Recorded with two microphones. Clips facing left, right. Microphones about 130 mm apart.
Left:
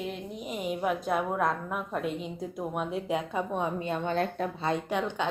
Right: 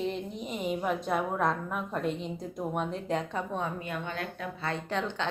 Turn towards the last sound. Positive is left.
turn(degrees=15)  # may be behind; listen again after turning